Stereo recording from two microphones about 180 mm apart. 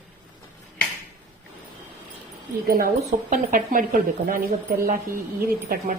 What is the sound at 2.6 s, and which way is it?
Speech, 55° right (ahead or behind).